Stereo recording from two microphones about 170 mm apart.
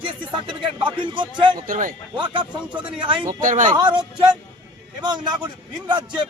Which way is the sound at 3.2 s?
50° right (ahead or behind).